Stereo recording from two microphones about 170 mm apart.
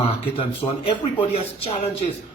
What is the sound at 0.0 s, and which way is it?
Speech, 30° left (ahead or behind).